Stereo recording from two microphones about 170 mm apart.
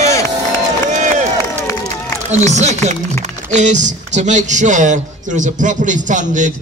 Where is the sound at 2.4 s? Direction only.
45° right (ahead or behind).